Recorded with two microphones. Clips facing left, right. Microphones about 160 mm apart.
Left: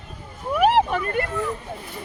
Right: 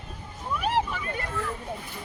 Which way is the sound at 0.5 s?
65° left (ahead or behind).